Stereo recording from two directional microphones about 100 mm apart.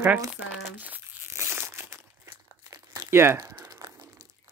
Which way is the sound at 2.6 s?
40° right (ahead or behind).